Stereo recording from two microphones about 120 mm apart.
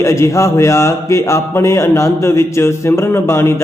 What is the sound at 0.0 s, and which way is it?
Speech, 25° left (ahead or behind).